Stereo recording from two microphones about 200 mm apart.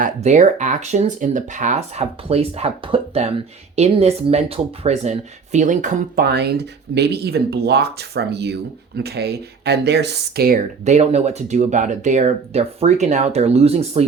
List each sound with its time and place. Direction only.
0.0 s speech: 35° right (ahead or behind)
10.8 s speech: 35° right (ahead or behind)